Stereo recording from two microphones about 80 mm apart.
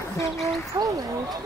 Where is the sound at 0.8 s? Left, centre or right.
Right.